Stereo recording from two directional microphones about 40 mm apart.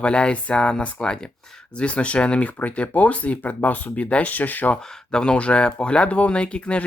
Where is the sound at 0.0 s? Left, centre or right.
Left.